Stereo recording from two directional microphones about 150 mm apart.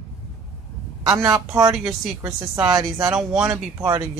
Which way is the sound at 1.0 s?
20° right (ahead or behind).